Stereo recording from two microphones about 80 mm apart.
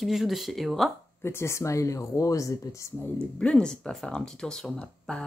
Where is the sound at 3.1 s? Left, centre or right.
Centre.